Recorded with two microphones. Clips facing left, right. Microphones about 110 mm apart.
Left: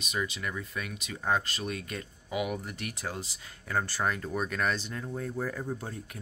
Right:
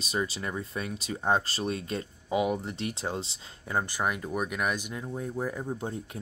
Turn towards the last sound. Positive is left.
turn(degrees=-25)  # may be behind; listen again after turning